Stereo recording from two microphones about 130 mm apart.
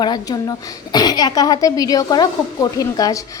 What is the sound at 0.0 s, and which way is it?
A woman's voice, 30° left (ahead or behind).